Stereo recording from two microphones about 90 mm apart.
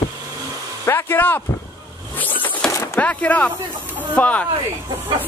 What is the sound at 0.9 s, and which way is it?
Speech, 25° left (ahead or behind).